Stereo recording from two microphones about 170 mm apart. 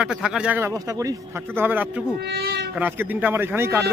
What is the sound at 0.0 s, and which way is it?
A man's voice, 5° right (ahead or behind).